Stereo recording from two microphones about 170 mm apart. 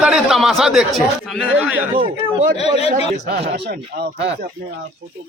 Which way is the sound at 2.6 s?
35° left (ahead or behind).